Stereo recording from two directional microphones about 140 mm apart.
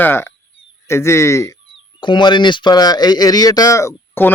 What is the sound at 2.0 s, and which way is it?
Speech, 35° left (ahead or behind).